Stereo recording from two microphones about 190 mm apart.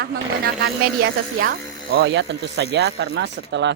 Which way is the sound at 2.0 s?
65° right (ahead or behind).